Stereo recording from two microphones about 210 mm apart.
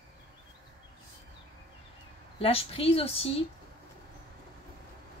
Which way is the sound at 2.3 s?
25° left (ahead or behind).